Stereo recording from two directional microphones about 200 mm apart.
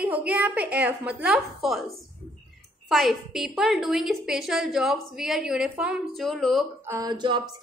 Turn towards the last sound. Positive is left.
turn(degrees=-20)  # may be behind; listen again after turning